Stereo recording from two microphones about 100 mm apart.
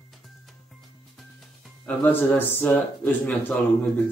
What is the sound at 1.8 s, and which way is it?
Speech, 15° left (ahead or behind).